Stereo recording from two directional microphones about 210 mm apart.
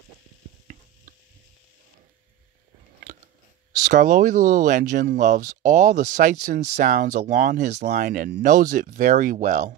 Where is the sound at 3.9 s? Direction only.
40° right (ahead or behind).